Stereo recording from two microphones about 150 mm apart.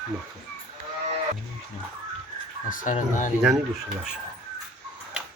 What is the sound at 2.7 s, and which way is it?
Speech, 60° left (ahead or behind).